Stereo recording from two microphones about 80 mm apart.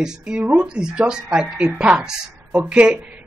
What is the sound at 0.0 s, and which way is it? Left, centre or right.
Speech, centre.